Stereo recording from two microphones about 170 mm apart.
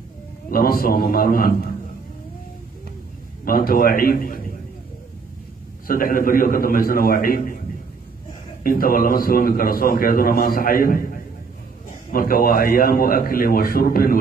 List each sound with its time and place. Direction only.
0.5 s a man's voice: 60° left (ahead or behind)
3.4 s a man's voice: 60° left (ahead or behind)
5.9 s a man's voice: 55° left (ahead or behind)
8.6 s a man's voice: 55° left (ahead or behind)